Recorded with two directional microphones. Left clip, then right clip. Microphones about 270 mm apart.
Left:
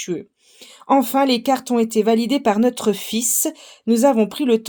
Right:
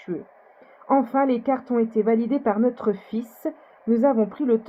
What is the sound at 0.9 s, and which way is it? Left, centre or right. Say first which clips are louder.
Speech: left 4 dB; left.